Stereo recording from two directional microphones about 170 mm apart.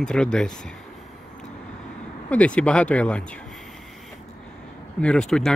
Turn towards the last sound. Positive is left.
turn(degrees=5)  # may be behind; listen again after turning